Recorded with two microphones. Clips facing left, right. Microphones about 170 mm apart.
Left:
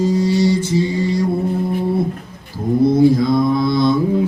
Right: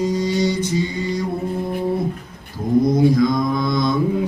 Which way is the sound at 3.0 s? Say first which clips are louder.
Left 3 dB; 30° left (ahead or behind).